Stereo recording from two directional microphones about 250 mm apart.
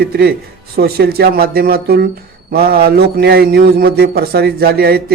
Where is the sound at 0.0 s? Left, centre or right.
Right.